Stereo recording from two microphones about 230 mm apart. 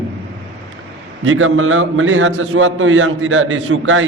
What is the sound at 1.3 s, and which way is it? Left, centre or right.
A man's voice, right.